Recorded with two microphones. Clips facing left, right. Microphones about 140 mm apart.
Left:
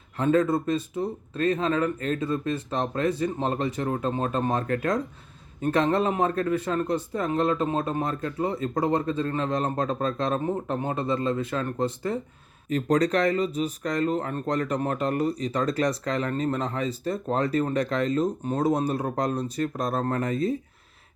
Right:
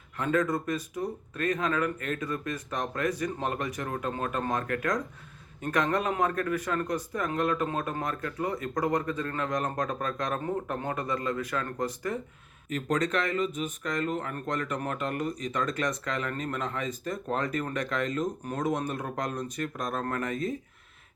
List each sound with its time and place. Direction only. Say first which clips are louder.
0.2 s speech: left 5 dB; 30° left (ahead or behind)